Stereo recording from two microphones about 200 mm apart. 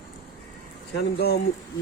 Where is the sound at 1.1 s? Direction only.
50° left (ahead or behind).